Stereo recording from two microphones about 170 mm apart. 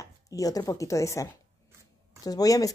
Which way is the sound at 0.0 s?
20° left (ahead or behind).